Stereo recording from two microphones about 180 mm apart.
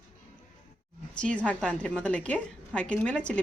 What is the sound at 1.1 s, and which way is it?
A woman's voice, 5° left (ahead or behind).